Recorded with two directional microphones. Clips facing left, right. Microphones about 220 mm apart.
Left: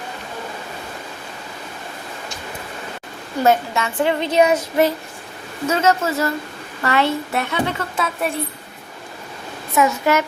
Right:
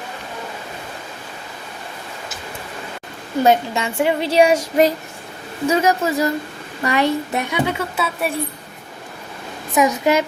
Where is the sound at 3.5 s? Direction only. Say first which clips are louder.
Even; 15° right (ahead or behind).